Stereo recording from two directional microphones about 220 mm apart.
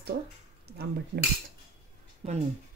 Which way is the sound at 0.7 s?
45° right (ahead or behind).